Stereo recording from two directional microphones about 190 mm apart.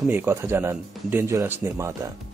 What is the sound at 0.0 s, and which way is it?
Speech, 10° right (ahead or behind).